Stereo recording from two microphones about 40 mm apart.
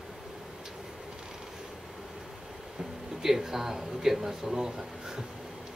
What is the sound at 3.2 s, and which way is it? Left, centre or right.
Speech, centre.